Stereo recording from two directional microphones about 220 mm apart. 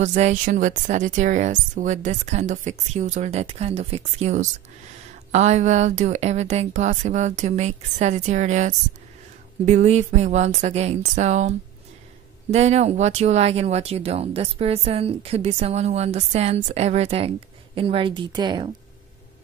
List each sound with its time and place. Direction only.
0.0 s a woman's voice: 30° right (ahead or behind)